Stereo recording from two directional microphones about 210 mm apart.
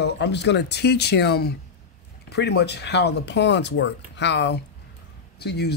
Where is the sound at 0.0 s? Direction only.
55° left (ahead or behind).